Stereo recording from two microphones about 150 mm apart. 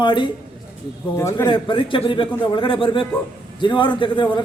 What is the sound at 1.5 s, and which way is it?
A man's voice, 35° left (ahead or behind).